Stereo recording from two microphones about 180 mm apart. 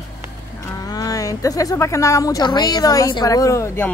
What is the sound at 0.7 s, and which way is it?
Speech, 20° left (ahead or behind).